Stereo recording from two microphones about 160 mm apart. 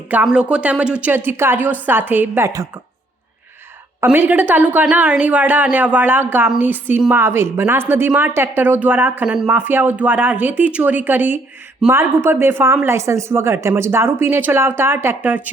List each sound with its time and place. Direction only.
0.1 s a woman's voice: 10° right (ahead or behind)
4.0 s a woman's voice: 10° right (ahead or behind)